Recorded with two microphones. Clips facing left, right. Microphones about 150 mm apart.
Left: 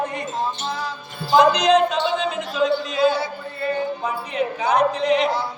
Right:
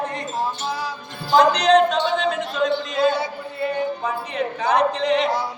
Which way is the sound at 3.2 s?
15° right (ahead or behind).